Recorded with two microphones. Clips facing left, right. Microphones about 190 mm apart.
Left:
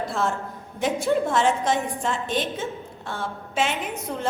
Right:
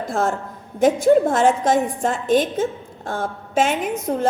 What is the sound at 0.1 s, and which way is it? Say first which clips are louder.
A woman's voice: right 4 dB; 45° right (ahead or behind).